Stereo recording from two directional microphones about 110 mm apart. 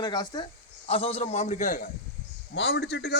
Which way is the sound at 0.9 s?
65° left (ahead or behind).